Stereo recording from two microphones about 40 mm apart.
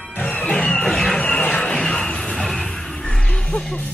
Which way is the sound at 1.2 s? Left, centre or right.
Left.